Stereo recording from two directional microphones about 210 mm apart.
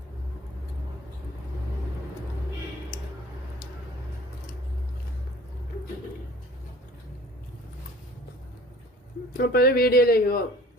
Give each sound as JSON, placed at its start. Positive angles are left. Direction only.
{"t": 9.4, "sound": "speech", "side_deg": 45}